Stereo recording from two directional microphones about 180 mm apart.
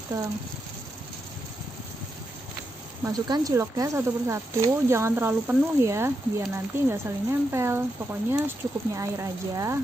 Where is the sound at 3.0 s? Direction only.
20° right (ahead or behind).